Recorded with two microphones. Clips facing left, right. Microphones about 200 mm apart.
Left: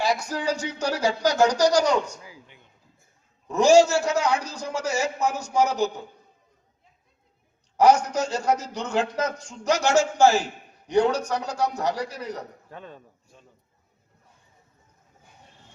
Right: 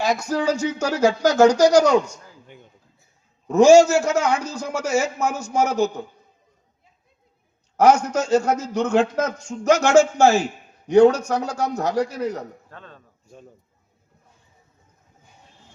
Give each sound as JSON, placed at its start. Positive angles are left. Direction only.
{"t": 0.0, "sound": "speech", "side_deg": -45}
{"t": 3.6, "sound": "speech", "side_deg": -45}
{"t": 7.8, "sound": "speech", "side_deg": -45}
{"t": 12.7, "sound": "speech", "side_deg": 15}